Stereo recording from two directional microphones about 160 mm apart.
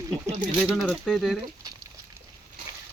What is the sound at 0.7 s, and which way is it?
Speech, centre (ahead or behind).